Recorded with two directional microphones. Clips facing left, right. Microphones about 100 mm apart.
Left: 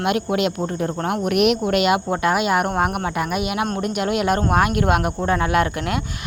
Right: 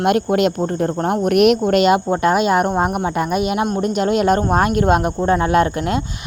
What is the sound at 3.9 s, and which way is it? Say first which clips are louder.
Speech: right 4 dB; 30° right (ahead or behind).